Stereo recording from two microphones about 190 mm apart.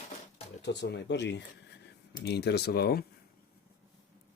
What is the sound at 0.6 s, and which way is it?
Speech, 65° left (ahead or behind).